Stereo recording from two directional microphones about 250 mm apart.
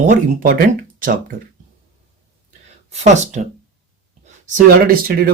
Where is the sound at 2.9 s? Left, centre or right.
Right.